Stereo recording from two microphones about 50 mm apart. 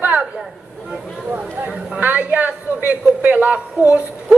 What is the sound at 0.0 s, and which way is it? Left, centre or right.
Chatter, right.